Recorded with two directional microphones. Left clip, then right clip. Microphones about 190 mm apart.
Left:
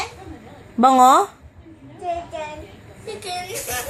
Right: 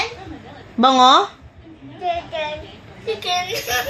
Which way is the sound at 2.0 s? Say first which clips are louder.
Right 4 dB; 25° left (ahead or behind).